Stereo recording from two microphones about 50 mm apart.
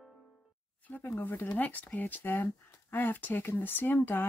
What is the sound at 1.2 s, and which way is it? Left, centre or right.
Speech, left.